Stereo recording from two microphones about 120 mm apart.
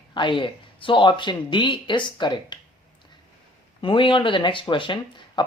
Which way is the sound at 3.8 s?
45° left (ahead or behind).